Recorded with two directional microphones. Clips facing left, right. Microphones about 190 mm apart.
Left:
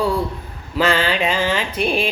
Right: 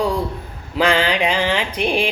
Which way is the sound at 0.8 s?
15° right (ahead or behind).